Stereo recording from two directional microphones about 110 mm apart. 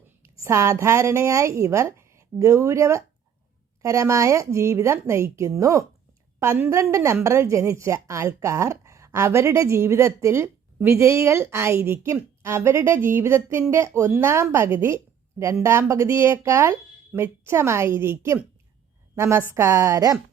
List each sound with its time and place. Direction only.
0.2 s a woman's voice: 25° right (ahead or behind)